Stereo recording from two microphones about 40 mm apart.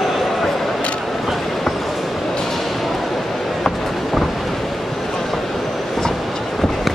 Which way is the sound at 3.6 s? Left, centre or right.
Centre.